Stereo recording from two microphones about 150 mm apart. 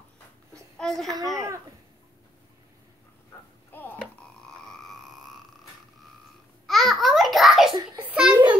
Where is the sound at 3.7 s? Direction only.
15° left (ahead or behind).